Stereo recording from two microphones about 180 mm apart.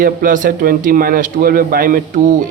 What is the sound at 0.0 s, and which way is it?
A man's voice, 50° right (ahead or behind).